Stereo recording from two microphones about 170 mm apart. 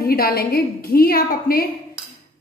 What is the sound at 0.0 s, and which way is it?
A woman's voice, 65° left (ahead or behind).